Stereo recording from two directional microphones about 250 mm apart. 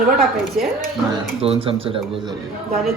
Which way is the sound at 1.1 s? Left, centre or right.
Right.